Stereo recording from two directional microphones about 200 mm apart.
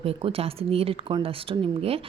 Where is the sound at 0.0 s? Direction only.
30° right (ahead or behind).